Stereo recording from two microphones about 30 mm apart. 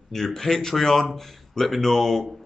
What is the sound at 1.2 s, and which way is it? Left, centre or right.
Speech, centre.